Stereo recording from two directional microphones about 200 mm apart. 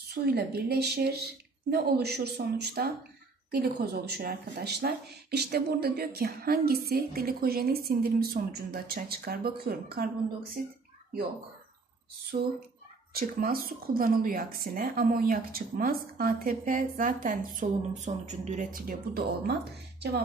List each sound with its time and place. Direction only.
0.1 s speech: 50° right (ahead or behind)
13.1 s speech: 45° right (ahead or behind)